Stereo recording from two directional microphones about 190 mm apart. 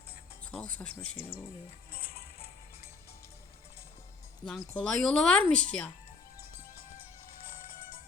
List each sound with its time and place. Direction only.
0.8 s speech: 10° left (ahead or behind)
1.9 s music: 50° left (ahead or behind)
4.4 s speech: 5° left (ahead or behind)